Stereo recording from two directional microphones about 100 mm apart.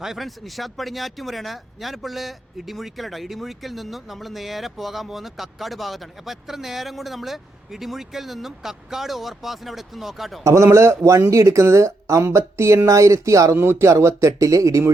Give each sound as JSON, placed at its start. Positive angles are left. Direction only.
{"t": 0.0, "sound": "speech", "side_deg": 0}
{"t": 10.4, "sound": "speech", "side_deg": -30}